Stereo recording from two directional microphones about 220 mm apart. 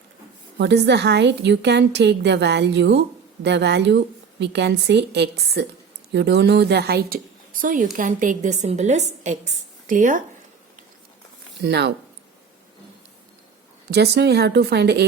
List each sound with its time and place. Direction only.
0.6 s a woman's voice: 50° right (ahead or behind)
11.6 s a woman's voice: 50° right (ahead or behind)
13.9 s a woman's voice: 50° right (ahead or behind)